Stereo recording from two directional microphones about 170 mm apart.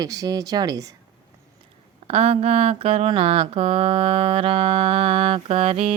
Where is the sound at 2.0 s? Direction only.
35° right (ahead or behind).